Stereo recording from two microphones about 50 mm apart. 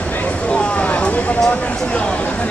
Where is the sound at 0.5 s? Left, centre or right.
Left.